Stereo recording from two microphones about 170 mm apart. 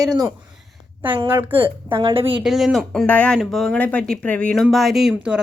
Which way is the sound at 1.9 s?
30° right (ahead or behind).